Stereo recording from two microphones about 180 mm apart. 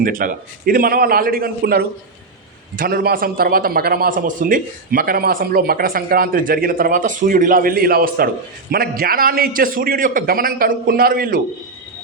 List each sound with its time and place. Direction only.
0.0 s a man's voice: 50° right (ahead or behind)